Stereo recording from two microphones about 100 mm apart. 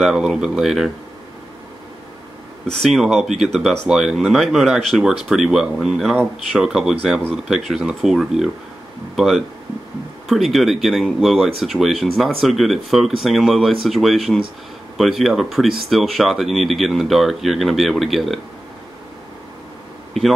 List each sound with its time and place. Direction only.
0.0 s speech: 5° right (ahead or behind)
2.6 s speech: 5° left (ahead or behind)